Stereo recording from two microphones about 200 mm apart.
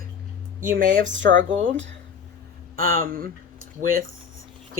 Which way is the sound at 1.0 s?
65° right (ahead or behind).